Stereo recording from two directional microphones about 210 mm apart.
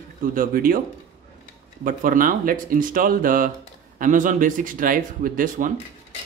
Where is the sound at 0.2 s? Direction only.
40° right (ahead or behind).